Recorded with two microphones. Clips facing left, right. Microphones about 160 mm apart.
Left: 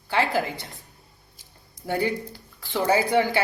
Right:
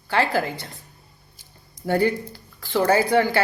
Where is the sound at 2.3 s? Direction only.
20° left (ahead or behind).